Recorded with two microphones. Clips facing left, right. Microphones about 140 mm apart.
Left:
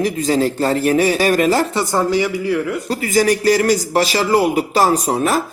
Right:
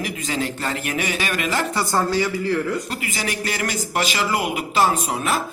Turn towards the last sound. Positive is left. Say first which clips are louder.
# left 6 dB
turn(degrees=40)  # may be behind; listen again after turning